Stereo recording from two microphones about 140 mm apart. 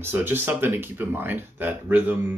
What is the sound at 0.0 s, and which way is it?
Speech, 15° right (ahead or behind).